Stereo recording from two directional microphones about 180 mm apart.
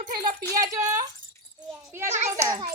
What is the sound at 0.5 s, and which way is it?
A child's voice, 20° right (ahead or behind).